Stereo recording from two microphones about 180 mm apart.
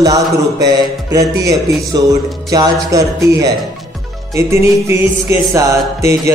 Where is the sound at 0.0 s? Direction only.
20° right (ahead or behind).